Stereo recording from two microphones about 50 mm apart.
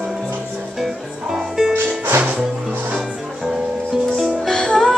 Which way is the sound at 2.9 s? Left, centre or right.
Centre.